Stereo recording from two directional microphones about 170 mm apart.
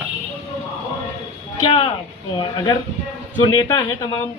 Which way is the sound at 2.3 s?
30° left (ahead or behind).